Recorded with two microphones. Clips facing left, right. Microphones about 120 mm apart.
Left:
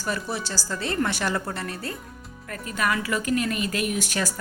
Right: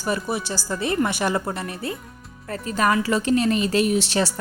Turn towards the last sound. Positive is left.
turn(degrees=-25)  # may be behind; listen again after turning